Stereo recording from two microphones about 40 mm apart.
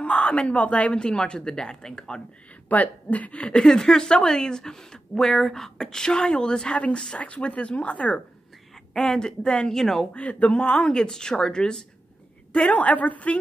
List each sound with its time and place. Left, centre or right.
0.0 s speech: left
2.7 s speech: left
3.6 s speech: centre
7.2 s speech: left
8.9 s speech: centre
9.8 s speech: centre
10.1 s speech: left; by 11.8 s centre
12.7 s speech: left